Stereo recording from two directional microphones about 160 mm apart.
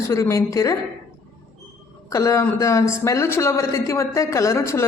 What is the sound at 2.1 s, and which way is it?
A woman's voice, 20° left (ahead or behind).